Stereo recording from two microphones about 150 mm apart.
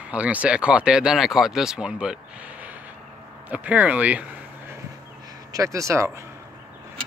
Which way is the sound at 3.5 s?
10° right (ahead or behind).